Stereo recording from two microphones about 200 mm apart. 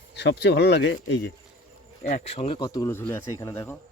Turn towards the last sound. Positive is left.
turn(degrees=15)  # may be behind; listen again after turning